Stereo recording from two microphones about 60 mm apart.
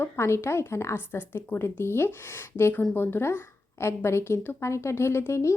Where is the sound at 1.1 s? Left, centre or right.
Left.